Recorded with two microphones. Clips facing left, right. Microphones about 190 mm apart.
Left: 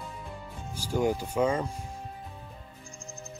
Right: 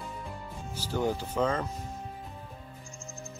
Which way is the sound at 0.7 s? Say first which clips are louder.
Left 3 dB; 10° left (ahead or behind).